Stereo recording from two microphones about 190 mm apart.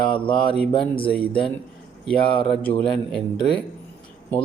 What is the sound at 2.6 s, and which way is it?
Speech, 5° left (ahead or behind).